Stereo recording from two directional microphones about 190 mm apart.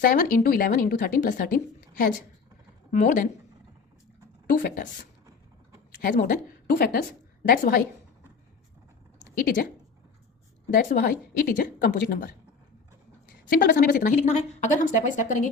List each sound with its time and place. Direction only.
0.0 s a woman's voice: 50° left (ahead or behind)
4.4 s a woman's voice: 45° left (ahead or behind)
6.0 s a woman's voice: 45° left (ahead or behind)
9.1 s a sound: 45° left (ahead or behind)
10.8 s a woman's voice: 45° left (ahead or behind)
13.5 s a woman's voice: 55° left (ahead or behind)